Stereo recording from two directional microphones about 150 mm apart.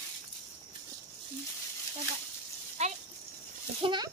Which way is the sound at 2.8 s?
45° right (ahead or behind).